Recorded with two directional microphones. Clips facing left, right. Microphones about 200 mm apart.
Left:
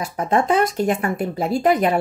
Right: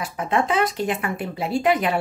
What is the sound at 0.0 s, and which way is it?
Speech, 40° left (ahead or behind).